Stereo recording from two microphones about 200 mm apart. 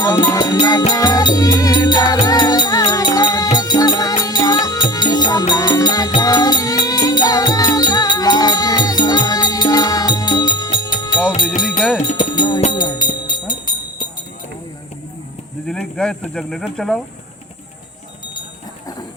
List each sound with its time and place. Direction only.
0.0 s music: 20° left (ahead or behind)
11.8 s music: centre (ahead or behind)
12.1 s music: 20° left (ahead or behind)
15.6 s speech: 5° left (ahead or behind)